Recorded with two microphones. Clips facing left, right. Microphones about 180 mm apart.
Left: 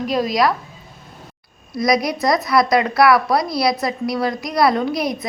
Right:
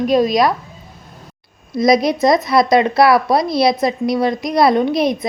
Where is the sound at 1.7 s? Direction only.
25° right (ahead or behind).